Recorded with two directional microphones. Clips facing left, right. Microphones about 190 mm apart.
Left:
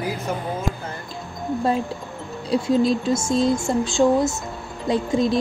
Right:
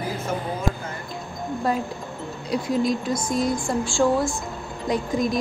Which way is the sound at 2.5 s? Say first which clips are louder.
Left 4 dB; 30° left (ahead or behind).